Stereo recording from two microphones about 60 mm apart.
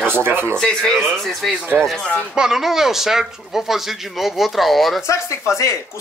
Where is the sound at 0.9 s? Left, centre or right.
Centre.